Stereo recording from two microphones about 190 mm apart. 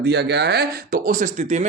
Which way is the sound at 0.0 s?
60° right (ahead or behind).